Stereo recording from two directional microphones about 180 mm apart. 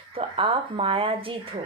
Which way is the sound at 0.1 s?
30° right (ahead or behind).